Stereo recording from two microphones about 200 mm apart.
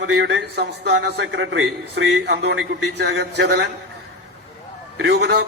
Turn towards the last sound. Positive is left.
turn(degrees=-55)  # may be behind; listen again after turning